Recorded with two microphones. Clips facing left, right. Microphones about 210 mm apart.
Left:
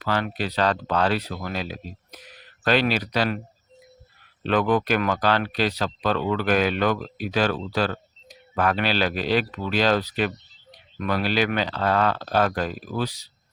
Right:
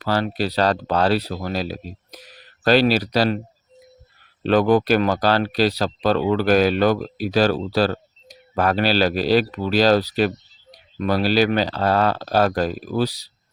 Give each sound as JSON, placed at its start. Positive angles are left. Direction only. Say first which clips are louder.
{"t": 0.0, "sound": "speech", "louder": "right 4 dB", "side_deg": -35}
{"t": 4.4, "sound": "speech", "louder": "right 5 dB", "side_deg": -35}